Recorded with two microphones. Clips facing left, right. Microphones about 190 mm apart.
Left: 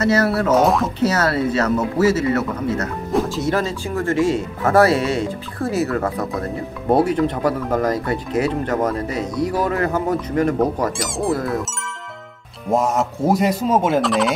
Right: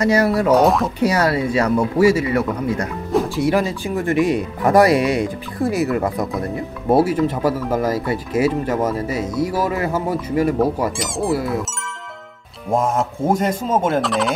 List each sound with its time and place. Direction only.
0.0 s speech: 15° right (ahead or behind)
0.6 s speech: centre (ahead or behind)
0.9 s speech: 15° right (ahead or behind)
12.6 s speech: centre (ahead or behind)